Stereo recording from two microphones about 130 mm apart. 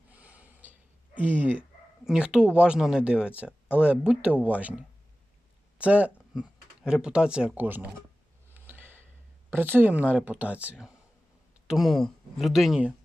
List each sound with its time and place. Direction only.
0.1 s snort: 10° right (ahead or behind)
1.2 s speech: 15° right (ahead or behind)
5.8 s speech: 10° right (ahead or behind)
8.5 s a sound: 15° right (ahead or behind)
9.5 s speech: 15° right (ahead or behind)